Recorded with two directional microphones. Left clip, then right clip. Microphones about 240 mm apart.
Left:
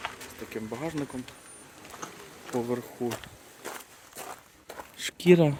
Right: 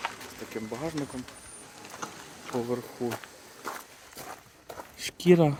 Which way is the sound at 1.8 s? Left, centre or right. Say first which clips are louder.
Right 2 dB; right.